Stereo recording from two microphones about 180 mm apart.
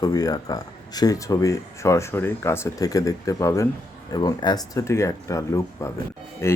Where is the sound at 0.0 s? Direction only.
20° left (ahead or behind).